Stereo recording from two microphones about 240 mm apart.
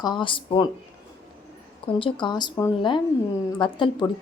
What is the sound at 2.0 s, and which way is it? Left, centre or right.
A woman's voice, centre.